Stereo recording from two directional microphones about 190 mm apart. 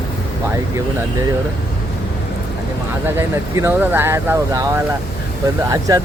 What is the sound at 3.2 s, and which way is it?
Speech, 15° right (ahead or behind).